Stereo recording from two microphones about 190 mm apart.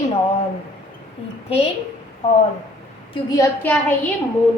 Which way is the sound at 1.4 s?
30° left (ahead or behind).